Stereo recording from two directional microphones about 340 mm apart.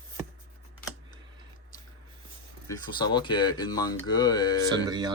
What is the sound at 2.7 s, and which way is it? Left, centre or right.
Speech, centre.